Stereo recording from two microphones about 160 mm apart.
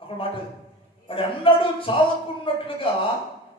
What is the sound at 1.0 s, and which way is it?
A man's voice, 35° left (ahead or behind).